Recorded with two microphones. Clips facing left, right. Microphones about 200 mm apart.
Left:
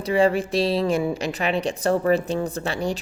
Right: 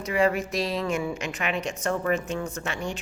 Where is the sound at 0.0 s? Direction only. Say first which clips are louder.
Left 4 dB; 30° left (ahead or behind).